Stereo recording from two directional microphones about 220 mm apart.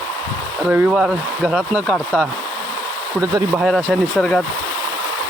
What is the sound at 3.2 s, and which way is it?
Speech, 15° right (ahead or behind).